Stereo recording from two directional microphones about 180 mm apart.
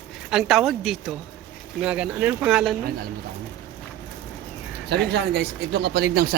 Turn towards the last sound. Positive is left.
turn(degrees=-60)  # may be behind; listen again after turning